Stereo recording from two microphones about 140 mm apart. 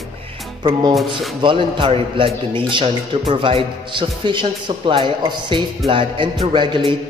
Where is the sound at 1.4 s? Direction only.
35° right (ahead or behind).